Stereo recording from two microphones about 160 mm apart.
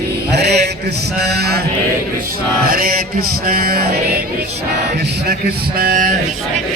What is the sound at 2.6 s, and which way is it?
Music, 65° right (ahead or behind).